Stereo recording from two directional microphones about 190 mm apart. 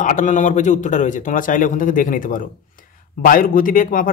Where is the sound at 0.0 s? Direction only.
40° left (ahead or behind).